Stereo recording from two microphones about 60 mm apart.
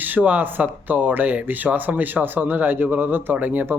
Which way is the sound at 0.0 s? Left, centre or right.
Right.